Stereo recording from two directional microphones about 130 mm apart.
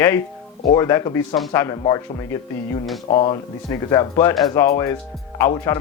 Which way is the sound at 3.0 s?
45° left (ahead or behind).